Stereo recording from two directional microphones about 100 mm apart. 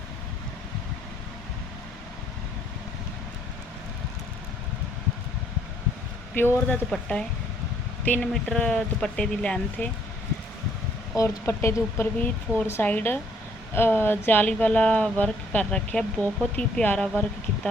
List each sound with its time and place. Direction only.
6.3 s speech: 20° left (ahead or behind)
6.9 s speech: 10° left (ahead or behind)
11.1 s speech: 30° left (ahead or behind); by 17.7 s 10° left (ahead or behind)